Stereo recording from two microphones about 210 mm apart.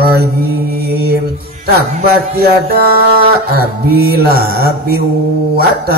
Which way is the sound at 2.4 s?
45° right (ahead or behind).